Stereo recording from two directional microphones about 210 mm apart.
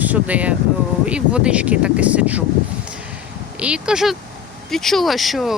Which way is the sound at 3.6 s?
5° right (ahead or behind).